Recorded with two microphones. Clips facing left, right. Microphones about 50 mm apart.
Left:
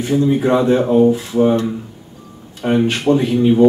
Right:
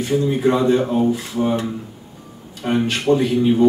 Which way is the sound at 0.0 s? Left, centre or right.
Centre.